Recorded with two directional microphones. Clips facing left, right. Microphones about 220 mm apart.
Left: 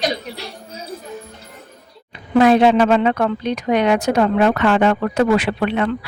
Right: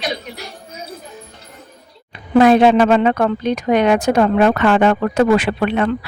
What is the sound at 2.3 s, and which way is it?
A woman's voice, 50° right (ahead or behind).